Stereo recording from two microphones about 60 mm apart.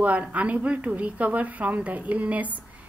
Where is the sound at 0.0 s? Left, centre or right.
Right.